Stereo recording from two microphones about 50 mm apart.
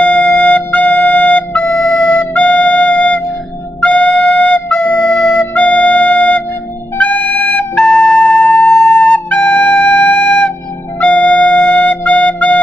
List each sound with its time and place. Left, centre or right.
0.0 s music: left
5.3 s music: left
5.6 s flute: left
7.0 s music: left